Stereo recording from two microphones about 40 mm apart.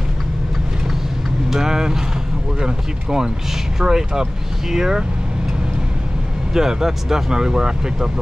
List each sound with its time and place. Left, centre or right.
1.5 s vehicle: centre
2.6 s speech: centre
6.5 s speech: centre